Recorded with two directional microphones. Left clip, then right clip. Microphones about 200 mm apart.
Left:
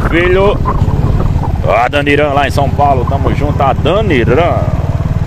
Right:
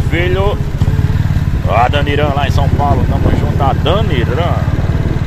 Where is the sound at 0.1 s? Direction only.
55° left (ahead or behind).